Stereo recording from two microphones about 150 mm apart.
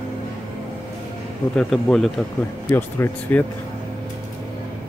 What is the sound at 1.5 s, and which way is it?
Speech, 5° left (ahead or behind).